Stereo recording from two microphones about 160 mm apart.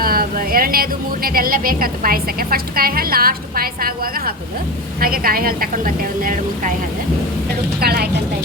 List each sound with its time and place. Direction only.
0.0 s a woman's voice: 65° right (ahead or behind)
7.8 s a woman's voice: 75° right (ahead or behind)